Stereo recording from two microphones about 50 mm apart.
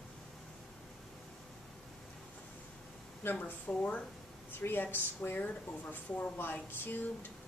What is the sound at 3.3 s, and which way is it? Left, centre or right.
A woman's voice, left.